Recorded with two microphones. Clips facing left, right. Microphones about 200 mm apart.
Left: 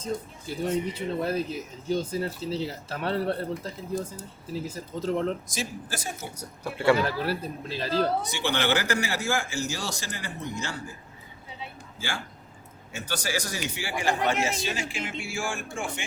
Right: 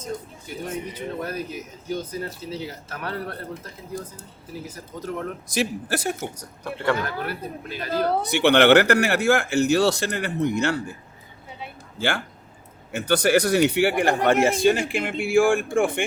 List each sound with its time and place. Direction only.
0.0 s speech: 30° left (ahead or behind)
5.5 s speech: 65° right (ahead or behind)
6.4 s speech: 10° left (ahead or behind)
7.0 s speech: 30° left (ahead or behind)
7.9 s speech: 60° right (ahead or behind)
11.9 s speech: 65° right (ahead or behind)